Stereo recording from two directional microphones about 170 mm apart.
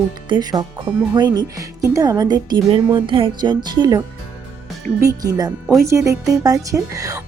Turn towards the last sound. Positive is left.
turn(degrees=-20)  # may be behind; listen again after turning